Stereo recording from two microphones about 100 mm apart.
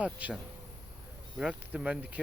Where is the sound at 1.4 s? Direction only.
10° right (ahead or behind).